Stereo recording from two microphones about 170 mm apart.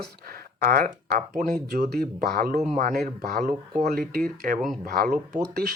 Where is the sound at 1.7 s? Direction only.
70° right (ahead or behind).